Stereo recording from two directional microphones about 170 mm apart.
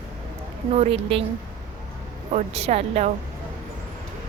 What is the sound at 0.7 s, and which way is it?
Speech, 35° right (ahead or behind).